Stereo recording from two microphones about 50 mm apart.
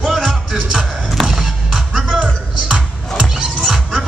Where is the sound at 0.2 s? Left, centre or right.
Centre.